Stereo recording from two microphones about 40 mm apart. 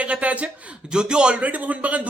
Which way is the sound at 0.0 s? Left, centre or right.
Right.